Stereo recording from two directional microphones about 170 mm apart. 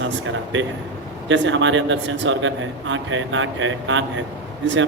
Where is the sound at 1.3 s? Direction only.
90° right.